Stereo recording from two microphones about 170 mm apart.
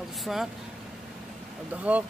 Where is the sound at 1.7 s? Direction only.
10° right (ahead or behind).